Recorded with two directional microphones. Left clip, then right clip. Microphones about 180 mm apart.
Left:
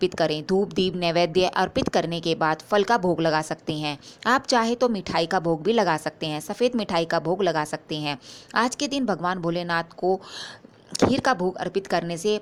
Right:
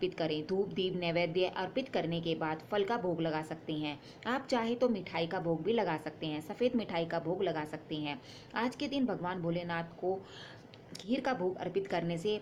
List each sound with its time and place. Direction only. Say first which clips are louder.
0.0 s speech: left 11 dB; 40° left (ahead or behind)